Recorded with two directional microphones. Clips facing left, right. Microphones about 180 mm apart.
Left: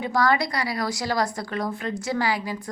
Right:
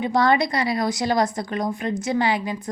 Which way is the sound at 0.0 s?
20° right (ahead or behind).